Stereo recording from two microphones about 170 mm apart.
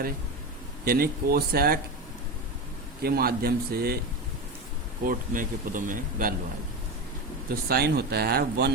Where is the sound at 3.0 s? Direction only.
65° right (ahead or behind).